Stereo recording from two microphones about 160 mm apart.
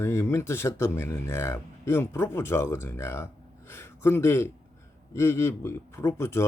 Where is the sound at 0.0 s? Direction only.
15° left (ahead or behind).